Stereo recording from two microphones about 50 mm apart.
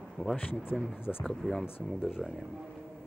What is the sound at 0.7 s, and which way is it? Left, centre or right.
Speech, centre.